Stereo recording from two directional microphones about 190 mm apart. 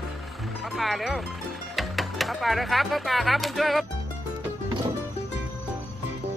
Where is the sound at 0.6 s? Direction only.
Centre (ahead or behind).